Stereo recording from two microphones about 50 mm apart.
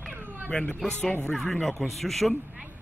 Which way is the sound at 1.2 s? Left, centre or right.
Centre.